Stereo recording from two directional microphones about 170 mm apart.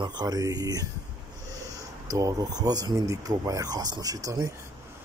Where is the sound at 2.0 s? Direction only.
20° right (ahead or behind).